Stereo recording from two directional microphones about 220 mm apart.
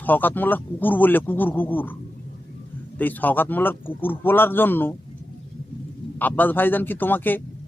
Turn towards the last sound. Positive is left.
turn(degrees=10)  # may be behind; listen again after turning